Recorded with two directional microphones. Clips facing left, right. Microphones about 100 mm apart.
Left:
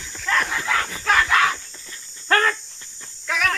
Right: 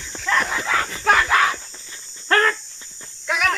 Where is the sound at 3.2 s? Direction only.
10° right (ahead or behind).